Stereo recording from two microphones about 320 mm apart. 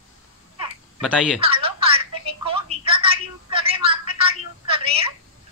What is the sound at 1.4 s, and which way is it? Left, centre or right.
Telephone, centre.